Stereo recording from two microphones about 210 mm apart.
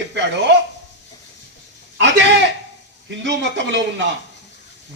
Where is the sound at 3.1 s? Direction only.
55° right (ahead or behind).